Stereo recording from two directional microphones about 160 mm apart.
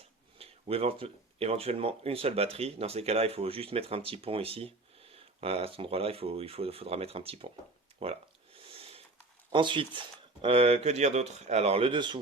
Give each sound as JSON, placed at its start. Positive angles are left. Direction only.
{"t": 0.3, "sound": "speech", "side_deg": -40}
{"t": 7.9, "sound": "a sound", "side_deg": -40}
{"t": 9.5, "sound": "speech", "side_deg": -30}